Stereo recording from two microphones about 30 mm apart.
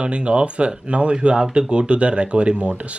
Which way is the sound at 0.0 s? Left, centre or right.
Right.